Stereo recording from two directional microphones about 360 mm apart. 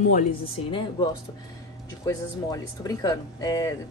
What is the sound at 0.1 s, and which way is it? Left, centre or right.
Speech, centre.